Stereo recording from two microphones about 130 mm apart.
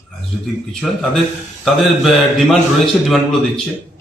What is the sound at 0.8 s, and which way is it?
A man's voice, centre (ahead or behind).